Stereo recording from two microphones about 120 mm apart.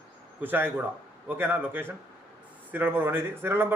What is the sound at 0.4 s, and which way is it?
Speech, 15° right (ahead or behind).